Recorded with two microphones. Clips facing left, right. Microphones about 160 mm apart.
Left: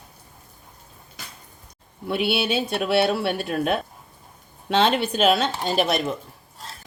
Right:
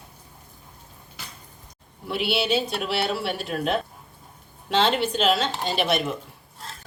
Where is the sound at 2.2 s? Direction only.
55° left (ahead or behind).